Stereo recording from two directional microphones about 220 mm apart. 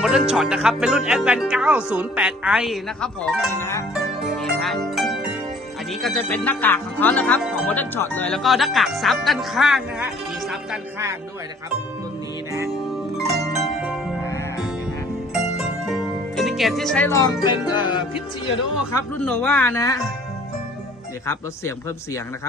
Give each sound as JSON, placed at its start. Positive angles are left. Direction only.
{"t": 0.0, "sound": "speech", "side_deg": 0}
{"t": 3.5, "sound": "speech", "side_deg": 10}
{"t": 3.9, "sound": "pizzicato", "side_deg": 0}
{"t": 6.0, "sound": "speech", "side_deg": 5}
{"t": 12.5, "sound": "music", "side_deg": -10}
{"t": 13.3, "sound": "pizzicato", "side_deg": 0}
{"t": 15.3, "sound": "music", "side_deg": 0}
{"t": 17.2, "sound": "music", "side_deg": 20}
{"t": 19.1, "sound": "speech", "side_deg": 5}
{"t": 21.3, "sound": "speech", "side_deg": 10}